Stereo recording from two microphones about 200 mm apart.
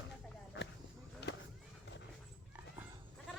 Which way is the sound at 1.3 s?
55° left (ahead or behind).